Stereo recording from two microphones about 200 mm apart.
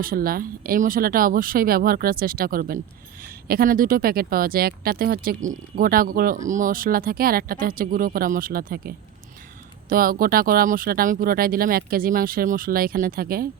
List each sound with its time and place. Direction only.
0.0 s speech: 45° right (ahead or behind)